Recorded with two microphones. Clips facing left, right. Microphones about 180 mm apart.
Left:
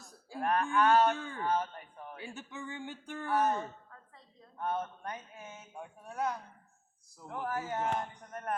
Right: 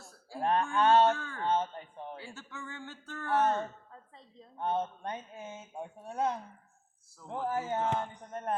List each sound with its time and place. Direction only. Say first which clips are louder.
0.0 s a sound: right 1 dB; 20° left (ahead or behind)
0.3 s a woman's voice: right 1 dB; 25° right (ahead or behind)
1.1 s speech: right 1 dB; 15° left (ahead or behind)
1.4 s speech: right 2 dB; 25° right (ahead or behind)
2.2 s speech: left 2 dB; 15° left (ahead or behind)
3.2 s a woman's voice: right 2 dB; 25° right (ahead or behind)